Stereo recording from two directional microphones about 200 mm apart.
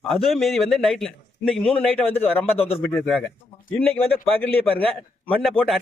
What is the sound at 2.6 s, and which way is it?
Speech, 30° left (ahead or behind).